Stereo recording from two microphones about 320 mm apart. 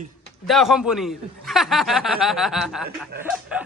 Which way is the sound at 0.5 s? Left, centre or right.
Centre.